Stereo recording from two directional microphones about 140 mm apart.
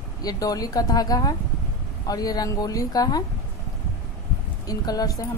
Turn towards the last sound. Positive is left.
turn(degrees=25)  # may be behind; listen again after turning